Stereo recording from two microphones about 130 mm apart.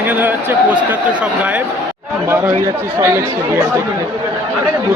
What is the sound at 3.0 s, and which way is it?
Speech, 15° right (ahead or behind).